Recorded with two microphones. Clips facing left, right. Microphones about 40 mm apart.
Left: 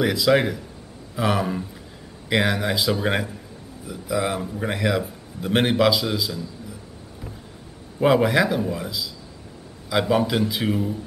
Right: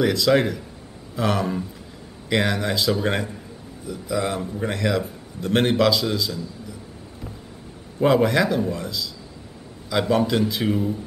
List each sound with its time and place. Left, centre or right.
0.0 s a man's voice: centre
8.0 s a man's voice: centre